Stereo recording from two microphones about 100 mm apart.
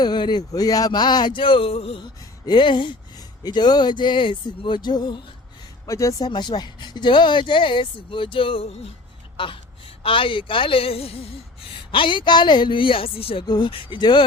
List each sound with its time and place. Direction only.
0.0 s speech: 50° left (ahead or behind); by 2.0 s 75° left (ahead or behind)
2.5 s speech: 55° left (ahead or behind)
5.8 s speech: 30° left (ahead or behind); by 8.9 s 80° left
9.4 s speech: 60° left (ahead or behind); by 11.3 s 80° left
11.9 s speech: 55° left (ahead or behind)
13.5 s speech: 55° left (ahead or behind)